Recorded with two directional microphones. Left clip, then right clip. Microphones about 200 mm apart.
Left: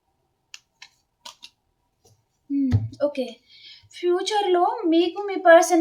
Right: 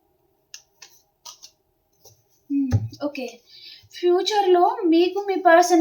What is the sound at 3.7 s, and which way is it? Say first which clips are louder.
A woman's voice: right 3 dB; 15° left (ahead or behind).